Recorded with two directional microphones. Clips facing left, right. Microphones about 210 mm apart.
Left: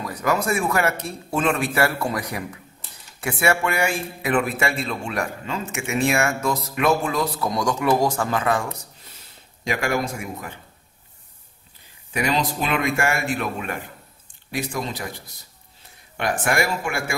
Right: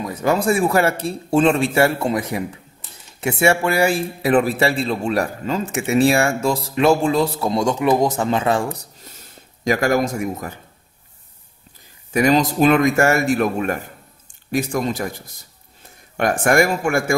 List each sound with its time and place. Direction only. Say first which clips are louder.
0.0 s a man's voice: right 4 dB; 25° right (ahead or behind)
9.7 s a man's voice: right 6 dB; 40° right (ahead or behind)
12.1 s a man's voice: right 7 dB; 45° right (ahead or behind)
16.2 s a man's voice: right 6 dB; 45° right (ahead or behind)